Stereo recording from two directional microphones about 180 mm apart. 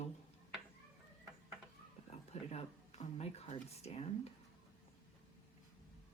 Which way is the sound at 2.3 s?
35° left (ahead or behind).